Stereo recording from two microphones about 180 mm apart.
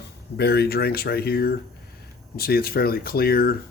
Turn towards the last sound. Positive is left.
turn(degrees=55)  # may be behind; listen again after turning